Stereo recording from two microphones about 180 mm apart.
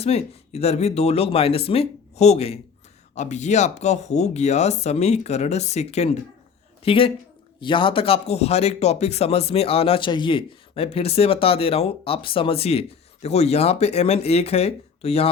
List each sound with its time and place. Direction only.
0.0 s speech: 35° left (ahead or behind)